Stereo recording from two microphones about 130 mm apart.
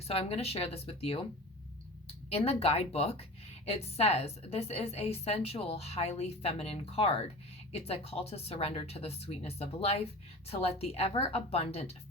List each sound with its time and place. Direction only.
0.1 s a woman's voice: 50° left (ahead or behind)
2.3 s a woman's voice: 50° left (ahead or behind)